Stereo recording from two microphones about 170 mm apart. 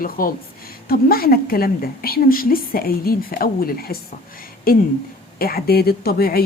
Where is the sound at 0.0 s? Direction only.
55° left (ahead or behind).